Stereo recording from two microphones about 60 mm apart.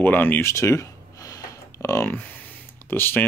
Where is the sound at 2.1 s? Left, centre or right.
Left.